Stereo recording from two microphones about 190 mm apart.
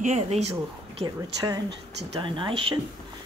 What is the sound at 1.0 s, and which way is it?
Speech, 20° right (ahead or behind).